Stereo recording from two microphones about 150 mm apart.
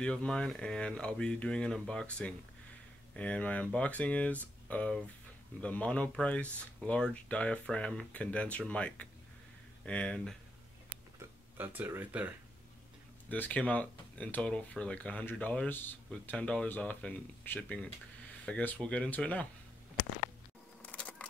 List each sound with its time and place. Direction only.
0.0 s speech: 5° left (ahead or behind)
11.1 s speech: 15° right (ahead or behind)
13.3 s speech: 10° left (ahead or behind)
20.8 s camera: 10° left (ahead or behind)